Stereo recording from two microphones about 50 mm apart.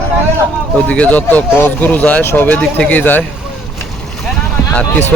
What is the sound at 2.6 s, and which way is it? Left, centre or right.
Speech, left.